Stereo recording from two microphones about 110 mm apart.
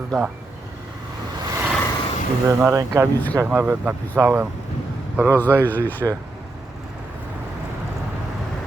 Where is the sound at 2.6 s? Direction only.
25° right (ahead or behind).